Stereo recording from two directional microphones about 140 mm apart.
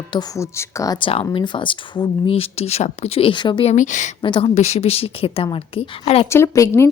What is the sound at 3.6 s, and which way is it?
Speech, 60° left (ahead or behind).